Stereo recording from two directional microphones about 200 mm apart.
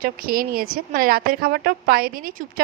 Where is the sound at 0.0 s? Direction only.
45° right (ahead or behind).